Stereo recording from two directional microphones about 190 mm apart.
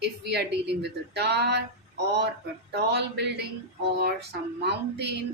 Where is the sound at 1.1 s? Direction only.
60° right (ahead or behind).